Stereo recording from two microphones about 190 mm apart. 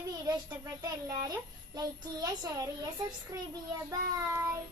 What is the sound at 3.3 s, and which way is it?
Child singing, 15° right (ahead or behind).